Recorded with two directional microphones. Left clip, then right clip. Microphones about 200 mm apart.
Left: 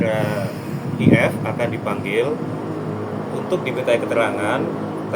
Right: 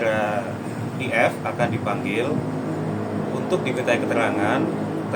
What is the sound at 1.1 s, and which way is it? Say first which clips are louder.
Speech: even; 5° left (ahead or behind).